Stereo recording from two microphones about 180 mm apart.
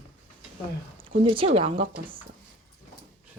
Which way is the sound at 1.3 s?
30° right (ahead or behind).